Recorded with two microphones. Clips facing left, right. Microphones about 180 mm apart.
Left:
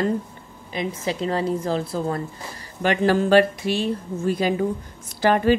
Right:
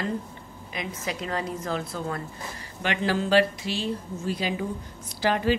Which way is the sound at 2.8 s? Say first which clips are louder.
Left 7 dB; 45° left (ahead or behind).